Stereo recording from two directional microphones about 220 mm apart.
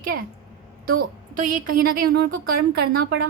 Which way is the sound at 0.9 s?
40° right (ahead or behind).